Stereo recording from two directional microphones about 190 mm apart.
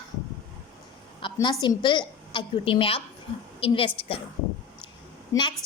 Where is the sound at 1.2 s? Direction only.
20° left (ahead or behind).